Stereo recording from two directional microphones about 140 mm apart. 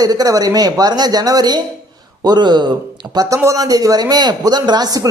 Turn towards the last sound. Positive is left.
turn(degrees=-30)  # may be behind; listen again after turning